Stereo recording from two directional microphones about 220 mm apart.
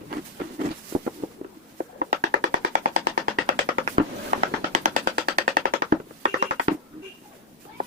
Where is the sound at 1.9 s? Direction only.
45° right (ahead or behind).